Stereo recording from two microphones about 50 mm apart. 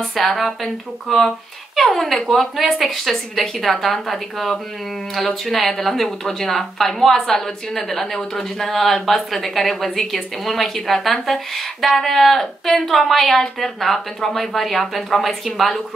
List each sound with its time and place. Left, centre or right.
0.0 s speech: centre